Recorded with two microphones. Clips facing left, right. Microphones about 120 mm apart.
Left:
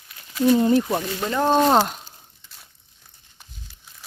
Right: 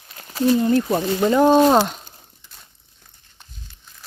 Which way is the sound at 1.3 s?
10° right (ahead or behind).